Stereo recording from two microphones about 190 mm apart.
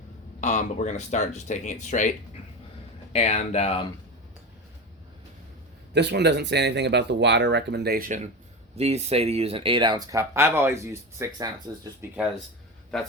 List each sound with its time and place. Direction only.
0.4 s speech: 40° left (ahead or behind)
5.9 s speech: 65° right (ahead or behind); by 8.3 s 45° right (ahead or behind)
8.8 s speech: 35° right (ahead or behind); by 12.2 s 15° right (ahead or behind)
12.9 s a man's voice: centre (ahead or behind)